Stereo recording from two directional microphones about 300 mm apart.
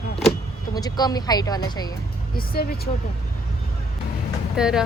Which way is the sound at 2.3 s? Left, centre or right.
Left.